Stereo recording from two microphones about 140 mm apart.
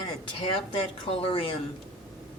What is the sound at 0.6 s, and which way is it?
Speech, 45° left (ahead or behind).